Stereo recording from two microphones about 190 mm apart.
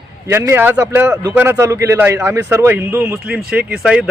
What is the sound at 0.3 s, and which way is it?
A man's voice, 10° right (ahead or behind).